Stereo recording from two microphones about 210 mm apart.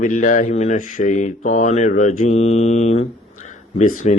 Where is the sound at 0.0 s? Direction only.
40° left (ahead or behind).